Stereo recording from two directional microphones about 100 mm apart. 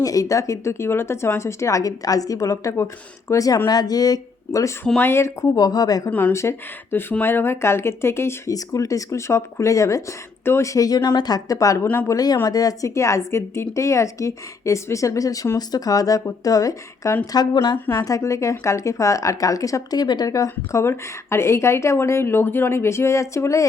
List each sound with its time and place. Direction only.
0.0 s a woman's voice: 35° left (ahead or behind)
4.9 s a woman's voice: 25° left (ahead or behind); by 6.1 s 40° left (ahead or behind)
6.1 s speech: 15° left (ahead or behind)
6.3 s a woman's voice: 25° left (ahead or behind)
17.3 s speech: 45° left (ahead or behind)
17.9 s a woman's voice: 35° left (ahead or behind)